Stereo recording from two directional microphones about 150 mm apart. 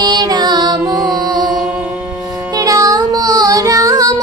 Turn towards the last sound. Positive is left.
turn(degrees=-20)  # may be behind; listen again after turning